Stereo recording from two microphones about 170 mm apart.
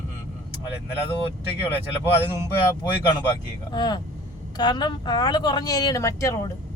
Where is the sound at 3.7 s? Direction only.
25° left (ahead or behind).